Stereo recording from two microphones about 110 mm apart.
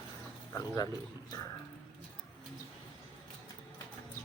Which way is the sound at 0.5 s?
35° left (ahead or behind).